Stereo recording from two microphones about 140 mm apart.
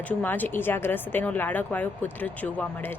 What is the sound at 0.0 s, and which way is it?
A woman's voice, 10° left (ahead or behind).